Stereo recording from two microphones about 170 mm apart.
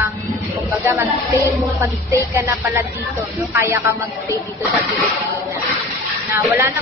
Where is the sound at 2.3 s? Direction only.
15° right (ahead or behind).